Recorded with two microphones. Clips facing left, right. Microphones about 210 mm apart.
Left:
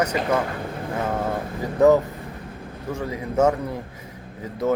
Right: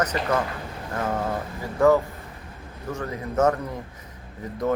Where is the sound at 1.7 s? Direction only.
20° left (ahead or behind).